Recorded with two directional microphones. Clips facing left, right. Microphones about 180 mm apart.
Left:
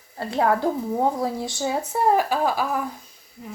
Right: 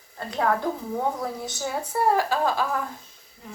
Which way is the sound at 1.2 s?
25° left (ahead or behind).